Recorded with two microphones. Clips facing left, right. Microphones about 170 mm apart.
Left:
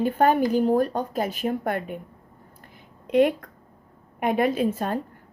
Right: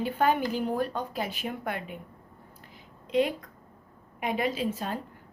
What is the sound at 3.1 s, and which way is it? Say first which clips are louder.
A woman's voice: left 7 dB; 60° left (ahead or behind).